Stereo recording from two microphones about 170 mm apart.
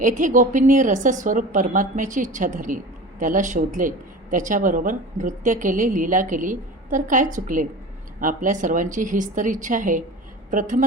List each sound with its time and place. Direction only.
0.0 s a woman's voice: 50° right (ahead or behind)